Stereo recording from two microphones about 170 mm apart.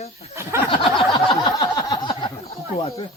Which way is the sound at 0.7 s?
30° left (ahead or behind).